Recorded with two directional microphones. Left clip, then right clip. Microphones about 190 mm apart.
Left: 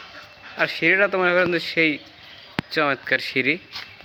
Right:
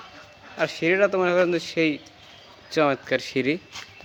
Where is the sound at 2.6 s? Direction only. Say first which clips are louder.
Even; 15° right (ahead or behind).